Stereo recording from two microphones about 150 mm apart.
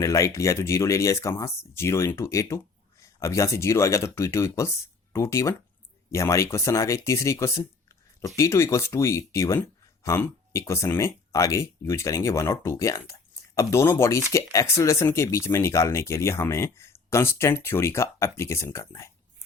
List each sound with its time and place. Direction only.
0.0 s speech: 20° left (ahead or behind)